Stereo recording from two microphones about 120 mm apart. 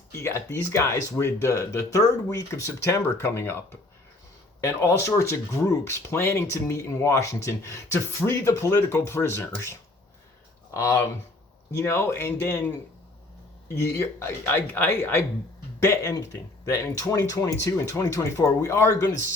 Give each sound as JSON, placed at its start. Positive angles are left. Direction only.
{"t": 0.2, "sound": "speech", "side_deg": 25}
{"t": 10.8, "sound": "speech", "side_deg": 25}
{"t": 13.7, "sound": "speech", "side_deg": 25}